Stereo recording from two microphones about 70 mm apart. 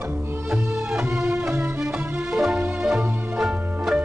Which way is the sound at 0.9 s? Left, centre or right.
Centre.